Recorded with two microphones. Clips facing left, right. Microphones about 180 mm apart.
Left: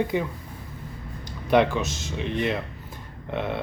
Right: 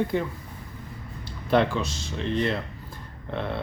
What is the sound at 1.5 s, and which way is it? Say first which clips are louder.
Speech: left 2 dB; 15° left (ahead or behind).